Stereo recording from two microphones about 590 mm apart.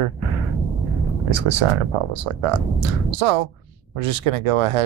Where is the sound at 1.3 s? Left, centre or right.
Right.